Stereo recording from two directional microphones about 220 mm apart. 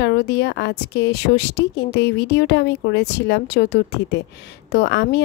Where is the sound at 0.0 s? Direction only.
50° left (ahead or behind).